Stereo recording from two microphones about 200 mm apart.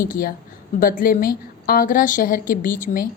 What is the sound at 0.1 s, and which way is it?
A woman's voice, 45° left (ahead or behind).